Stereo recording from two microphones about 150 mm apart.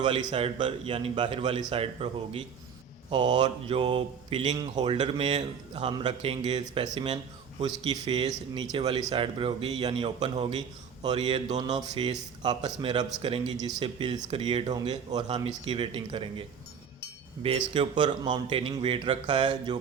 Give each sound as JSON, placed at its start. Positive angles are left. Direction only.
{"t": 0.0, "sound": "speech", "side_deg": -30}
{"t": 5.9, "sound": "speech", "side_deg": -30}
{"t": 11.7, "sound": "speech", "side_deg": -45}